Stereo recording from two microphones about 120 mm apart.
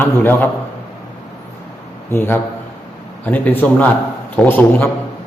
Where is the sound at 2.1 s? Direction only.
20° left (ahead or behind).